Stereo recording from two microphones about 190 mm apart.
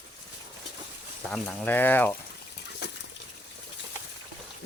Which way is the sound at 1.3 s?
5° left (ahead or behind).